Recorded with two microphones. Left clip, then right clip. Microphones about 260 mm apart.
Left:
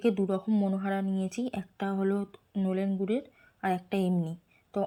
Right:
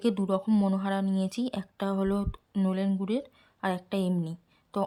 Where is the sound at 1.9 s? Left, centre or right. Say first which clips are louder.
Left 2 dB; centre.